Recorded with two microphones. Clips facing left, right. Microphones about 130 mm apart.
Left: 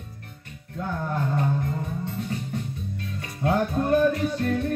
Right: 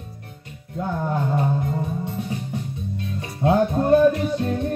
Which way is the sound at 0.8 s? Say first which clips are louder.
Right 4 dB; 20° right (ahead or behind).